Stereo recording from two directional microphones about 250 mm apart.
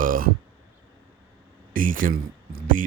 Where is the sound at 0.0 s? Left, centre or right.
Right.